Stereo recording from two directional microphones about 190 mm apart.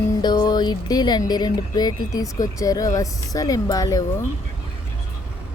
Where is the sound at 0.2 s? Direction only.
20° left (ahead or behind).